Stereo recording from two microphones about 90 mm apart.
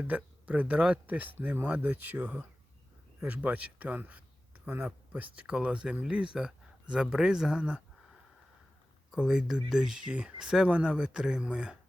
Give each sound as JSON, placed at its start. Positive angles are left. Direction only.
{"t": 0.0, "sound": "speech", "side_deg": -15}
{"t": 9.1, "sound": "speech", "side_deg": -10}